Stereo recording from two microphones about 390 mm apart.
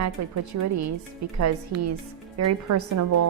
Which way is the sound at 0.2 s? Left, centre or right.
Right.